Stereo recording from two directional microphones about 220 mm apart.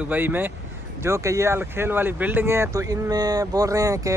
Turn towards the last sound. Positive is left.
turn(degrees=-15)  # may be behind; listen again after turning